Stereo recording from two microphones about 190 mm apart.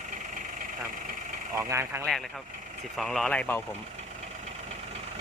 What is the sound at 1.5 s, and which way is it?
Speech, 15° right (ahead or behind).